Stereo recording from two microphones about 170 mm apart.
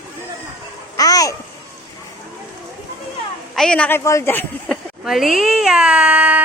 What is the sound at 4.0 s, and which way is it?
Speech, 15° left (ahead or behind).